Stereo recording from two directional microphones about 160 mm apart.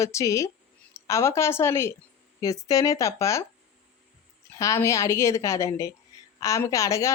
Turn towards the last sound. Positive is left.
turn(degrees=20)  # may be behind; listen again after turning